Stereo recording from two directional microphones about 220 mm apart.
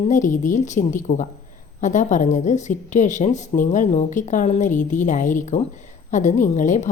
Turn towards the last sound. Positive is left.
turn(degrees=35)  # may be behind; listen again after turning